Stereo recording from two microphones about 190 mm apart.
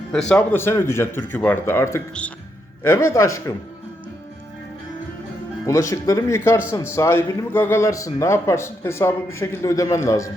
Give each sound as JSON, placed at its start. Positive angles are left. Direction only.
{"t": 0.1, "sound": "a man's voice", "side_deg": 5}
{"t": 0.3, "sound": "a man's voice", "side_deg": 15}
{"t": 5.6, "sound": "a man's voice", "side_deg": 15}